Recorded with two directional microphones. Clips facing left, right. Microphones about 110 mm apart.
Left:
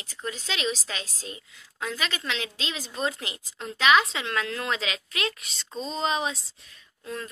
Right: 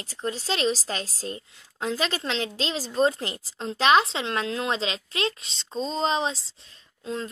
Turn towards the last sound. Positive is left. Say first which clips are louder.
# right 4 dB
turn(degrees=-25)  # may be behind; listen again after turning